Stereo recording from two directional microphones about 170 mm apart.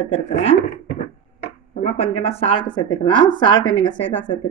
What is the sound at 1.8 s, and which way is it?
Speech, 35° left (ahead or behind).